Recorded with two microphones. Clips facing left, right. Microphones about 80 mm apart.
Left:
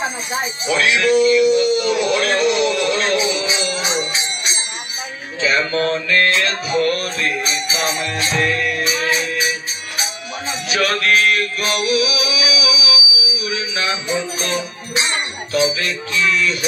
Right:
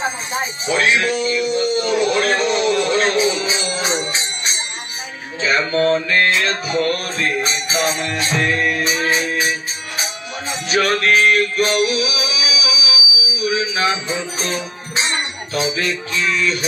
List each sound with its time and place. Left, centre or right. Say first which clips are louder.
0.7 s a sound: left 1 dB; right
5.4 s music: right 1 dB; right
10.7 s music: right 1 dB; right
15.5 s music: left 3 dB; right